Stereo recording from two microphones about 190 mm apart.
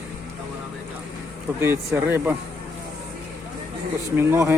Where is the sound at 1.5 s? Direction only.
15° right (ahead or behind).